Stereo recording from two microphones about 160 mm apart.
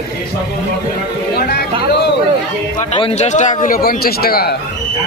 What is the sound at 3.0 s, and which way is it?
A man's voice, 40° left (ahead or behind).